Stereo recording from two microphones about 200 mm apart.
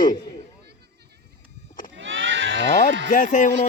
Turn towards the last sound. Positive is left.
turn(degrees=40)  # may be behind; listen again after turning